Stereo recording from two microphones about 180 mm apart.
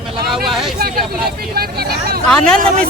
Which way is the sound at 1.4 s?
60° right (ahead or behind).